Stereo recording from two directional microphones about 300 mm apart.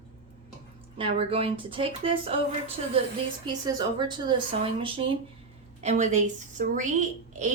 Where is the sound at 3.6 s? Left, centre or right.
Centre.